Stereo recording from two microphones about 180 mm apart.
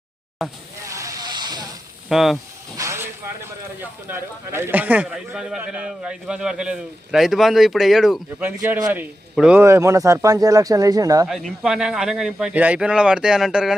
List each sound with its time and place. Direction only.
0.4 s speech: centre (ahead or behind)
0.9 s hiss: 15° right (ahead or behind)
2.0 s speech: centre (ahead or behind)
2.7 s vehicle: 15° right (ahead or behind)
3.8 s a man's voice: 15° right (ahead or behind)
11.3 s speech: centre (ahead or behind)